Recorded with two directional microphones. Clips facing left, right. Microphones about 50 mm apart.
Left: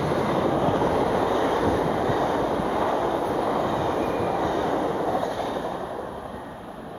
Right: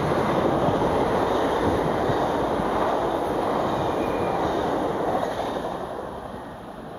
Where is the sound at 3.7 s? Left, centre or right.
Left.